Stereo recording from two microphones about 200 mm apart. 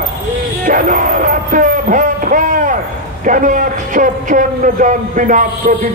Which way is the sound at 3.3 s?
40° right (ahead or behind).